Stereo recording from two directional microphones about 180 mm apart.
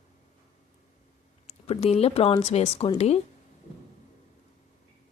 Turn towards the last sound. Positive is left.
turn(degrees=35)  # may be behind; listen again after turning